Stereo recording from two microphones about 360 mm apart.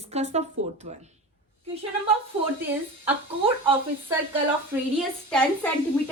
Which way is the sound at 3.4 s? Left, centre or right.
Centre.